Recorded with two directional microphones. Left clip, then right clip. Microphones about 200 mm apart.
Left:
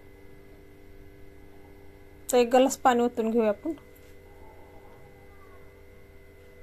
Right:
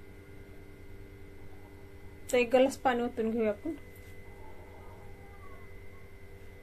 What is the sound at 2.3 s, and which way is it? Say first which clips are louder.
A woman's voice: left 4 dB; 35° left (ahead or behind).